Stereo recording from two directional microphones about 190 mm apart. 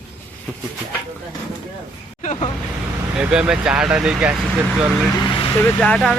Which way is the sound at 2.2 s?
40° left (ahead or behind).